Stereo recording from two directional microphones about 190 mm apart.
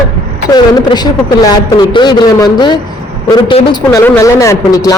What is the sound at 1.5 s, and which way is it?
A man's voice, 25° left (ahead or behind).